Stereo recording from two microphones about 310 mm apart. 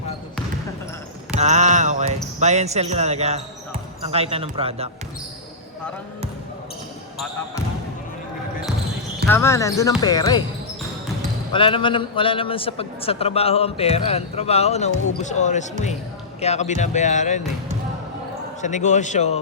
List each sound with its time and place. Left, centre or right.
1.3 s speech: right
9.3 s speech: centre
11.5 s a man's voice: centre
18.6 s a man's voice: left